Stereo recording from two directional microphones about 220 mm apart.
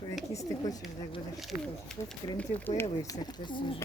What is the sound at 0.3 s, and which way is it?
Speech, 15° left (ahead or behind).